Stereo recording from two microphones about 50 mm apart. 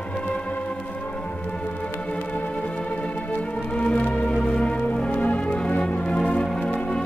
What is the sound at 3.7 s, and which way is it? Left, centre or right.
Music, left.